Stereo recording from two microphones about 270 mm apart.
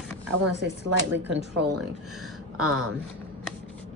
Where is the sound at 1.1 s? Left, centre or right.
Centre.